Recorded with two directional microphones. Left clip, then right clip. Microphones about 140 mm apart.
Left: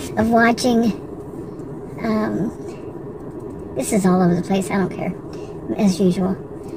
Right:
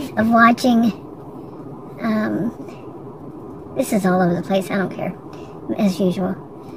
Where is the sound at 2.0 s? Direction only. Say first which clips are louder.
Even; 30° right (ahead or behind).